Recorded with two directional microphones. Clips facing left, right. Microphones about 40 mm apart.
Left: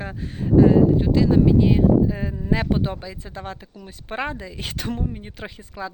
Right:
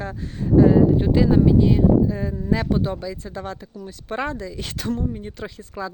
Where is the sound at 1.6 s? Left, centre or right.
Centre.